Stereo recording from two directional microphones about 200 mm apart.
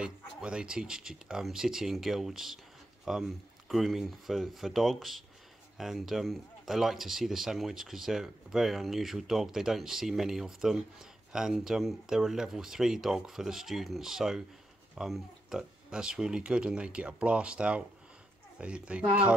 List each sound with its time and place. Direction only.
0.0 s speech: 5° right (ahead or behind)